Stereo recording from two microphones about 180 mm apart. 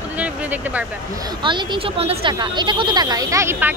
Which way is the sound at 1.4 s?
25° right (ahead or behind).